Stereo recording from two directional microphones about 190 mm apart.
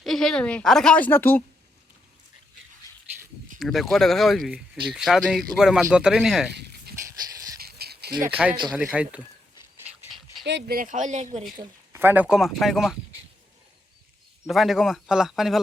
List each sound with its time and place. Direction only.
0.0 s a woman's voice: centre (ahead or behind)
3.6 s a woman's voice: centre (ahead or behind)
6.5 s a sound: 60° right (ahead or behind)
8.4 s a woman's voice: 5° right (ahead or behind)
10.1 s dog: centre (ahead or behind)
10.4 s speech: 60° right (ahead or behind); by 11.4 s 40° right (ahead or behind)
11.9 s a woman's voice: 10° right (ahead or behind)
14.4 s a woman's voice: centre (ahead or behind)